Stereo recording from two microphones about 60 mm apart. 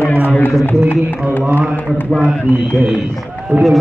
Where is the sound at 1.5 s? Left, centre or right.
Right.